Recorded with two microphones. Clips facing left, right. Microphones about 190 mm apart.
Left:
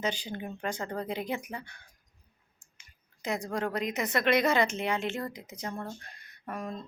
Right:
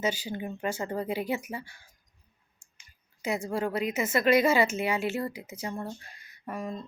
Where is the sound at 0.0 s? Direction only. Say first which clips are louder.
Right 3 dB; 10° right (ahead or behind).